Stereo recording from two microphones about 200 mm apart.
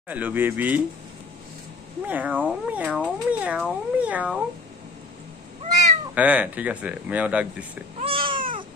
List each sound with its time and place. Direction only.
0.1 s speech: 10° right (ahead or behind)
2.0 s speech: 10° right (ahead or behind)
6.1 s speech: 5° right (ahead or behind)
8.0 s cat: 25° right (ahead or behind)